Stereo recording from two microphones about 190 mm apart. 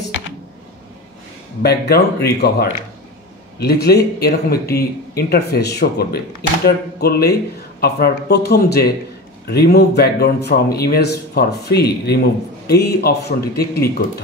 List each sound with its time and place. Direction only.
1.6 s speech: 60° left (ahead or behind)